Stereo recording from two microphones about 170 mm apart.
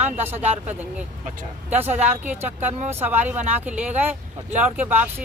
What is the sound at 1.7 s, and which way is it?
Speech, 10° right (ahead or behind).